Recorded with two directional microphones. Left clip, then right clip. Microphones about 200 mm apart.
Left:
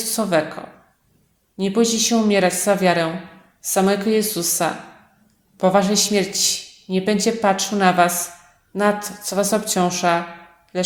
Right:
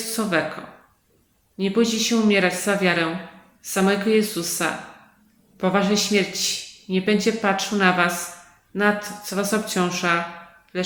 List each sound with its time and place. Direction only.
0.0 s speech: 35° left (ahead or behind)
1.5 s a man's voice: 35° left (ahead or behind)
10.7 s a sound: 35° left (ahead or behind)